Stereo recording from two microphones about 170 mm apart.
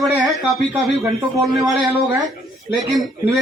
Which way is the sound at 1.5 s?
20° right (ahead or behind).